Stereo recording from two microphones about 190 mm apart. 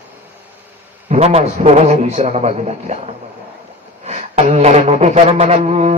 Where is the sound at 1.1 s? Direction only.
30° right (ahead or behind).